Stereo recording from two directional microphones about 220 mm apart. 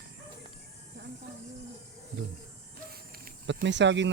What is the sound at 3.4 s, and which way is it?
Speech, 55° right (ahead or behind).